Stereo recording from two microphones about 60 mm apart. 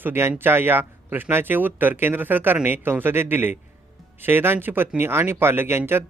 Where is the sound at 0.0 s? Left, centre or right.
Right.